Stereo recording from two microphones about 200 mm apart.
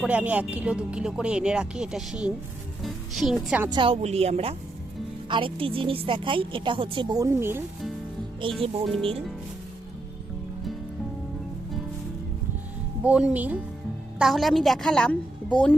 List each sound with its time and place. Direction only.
0.0 s speech: 5° right (ahead or behind)
3.7 s a woman's voice: 25° right (ahead or behind)
8.6 s a woman's voice: 25° right (ahead or behind)
13.1 s speech: 5° right (ahead or behind)